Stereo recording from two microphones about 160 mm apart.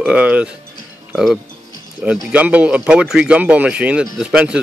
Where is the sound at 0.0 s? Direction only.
5° right (ahead or behind).